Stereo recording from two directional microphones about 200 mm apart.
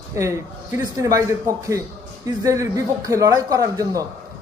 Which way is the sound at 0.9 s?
15° right (ahead or behind).